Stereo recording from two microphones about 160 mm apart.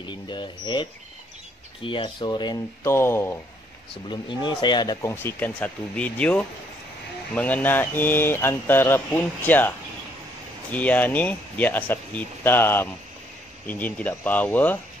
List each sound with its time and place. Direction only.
0.0 s speech: 30° left (ahead or behind)
2.8 s speech: 15° left (ahead or behind)
3.9 s speech: 30° left (ahead or behind)
5.1 s speech: 10° left (ahead or behind)